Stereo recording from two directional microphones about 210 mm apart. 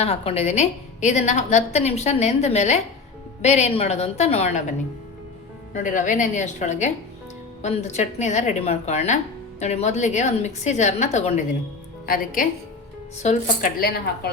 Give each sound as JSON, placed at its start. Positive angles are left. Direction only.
{"t": 0.0, "sound": "a woman's voice", "side_deg": 30}
{"t": 5.7, "sound": "a woman's voice", "side_deg": 40}
{"t": 12.0, "sound": "a woman's voice", "side_deg": 45}